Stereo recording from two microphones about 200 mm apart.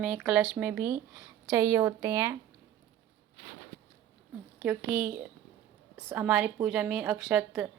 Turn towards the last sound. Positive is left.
turn(degrees=-5)  # may be behind; listen again after turning